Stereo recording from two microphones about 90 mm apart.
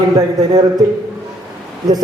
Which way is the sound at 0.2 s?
45° right (ahead or behind).